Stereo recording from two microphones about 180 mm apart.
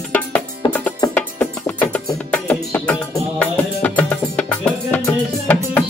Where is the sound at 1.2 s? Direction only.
10° left (ahead or behind).